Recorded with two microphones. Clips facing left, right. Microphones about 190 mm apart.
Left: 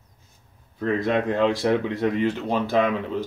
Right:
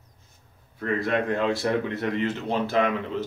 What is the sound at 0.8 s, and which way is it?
Speech, 20° left (ahead or behind).